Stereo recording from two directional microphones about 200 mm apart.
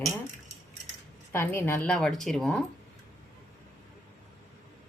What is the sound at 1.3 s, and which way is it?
A woman's voice, 10° left (ahead or behind).